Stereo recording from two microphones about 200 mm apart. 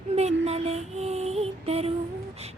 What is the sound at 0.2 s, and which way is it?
Mantra, 30° right (ahead or behind).